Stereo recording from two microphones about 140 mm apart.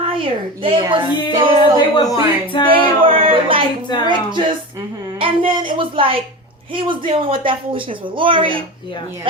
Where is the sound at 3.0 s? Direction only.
40° right (ahead or behind).